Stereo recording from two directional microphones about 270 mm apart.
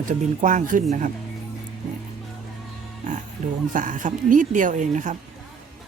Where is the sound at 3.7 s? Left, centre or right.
Right.